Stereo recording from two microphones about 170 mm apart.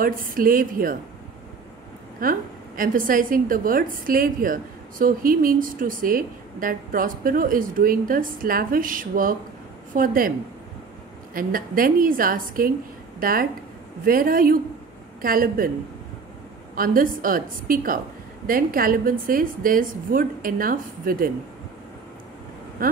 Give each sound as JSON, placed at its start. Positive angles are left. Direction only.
{"t": 0.0, "sound": "a woman's voice", "side_deg": -55}
{"t": 2.1, "sound": "a woman's voice", "side_deg": -55}
{"t": 11.3, "sound": "a woman's voice", "side_deg": -55}
{"t": 16.7, "sound": "a woman's voice", "side_deg": -55}
{"t": 22.8, "sound": "a sound", "side_deg": -55}